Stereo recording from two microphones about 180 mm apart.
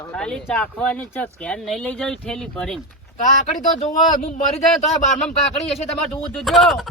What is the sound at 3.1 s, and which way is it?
Speech, 45° left (ahead or behind).